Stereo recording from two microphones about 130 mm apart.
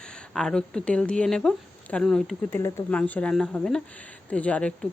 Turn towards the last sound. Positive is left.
turn(degrees=10)  # may be behind; listen again after turning